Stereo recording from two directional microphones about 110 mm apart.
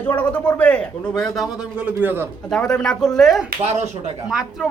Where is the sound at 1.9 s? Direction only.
15° right (ahead or behind).